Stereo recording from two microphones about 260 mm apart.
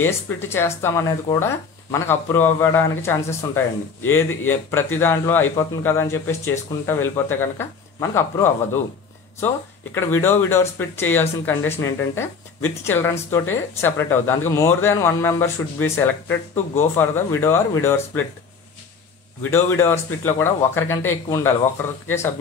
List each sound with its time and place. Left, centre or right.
0.0 s speech: centre
9.9 s speech: centre
19.5 s speech: centre